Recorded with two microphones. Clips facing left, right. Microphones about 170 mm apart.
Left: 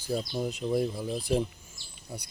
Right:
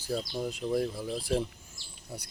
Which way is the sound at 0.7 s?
15° left (ahead or behind).